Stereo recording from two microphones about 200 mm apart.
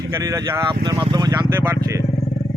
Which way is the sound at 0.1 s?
15° right (ahead or behind).